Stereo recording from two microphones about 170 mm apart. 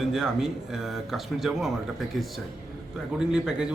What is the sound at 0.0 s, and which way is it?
A man's voice, 5° right (ahead or behind).